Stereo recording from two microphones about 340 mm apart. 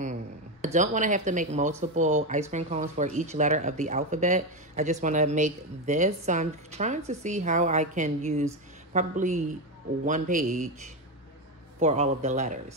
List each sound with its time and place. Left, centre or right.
0.0 s speech: right